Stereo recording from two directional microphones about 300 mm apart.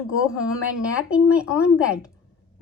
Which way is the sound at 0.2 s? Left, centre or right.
Centre.